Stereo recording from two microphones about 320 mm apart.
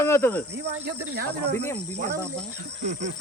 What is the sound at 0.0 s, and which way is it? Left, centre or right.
Speech, centre.